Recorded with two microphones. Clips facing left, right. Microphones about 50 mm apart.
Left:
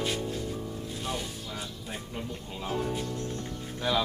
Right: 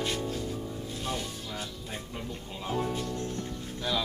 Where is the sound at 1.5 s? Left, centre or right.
Centre.